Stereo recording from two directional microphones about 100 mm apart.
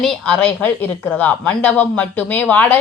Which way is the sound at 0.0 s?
10° left (ahead or behind).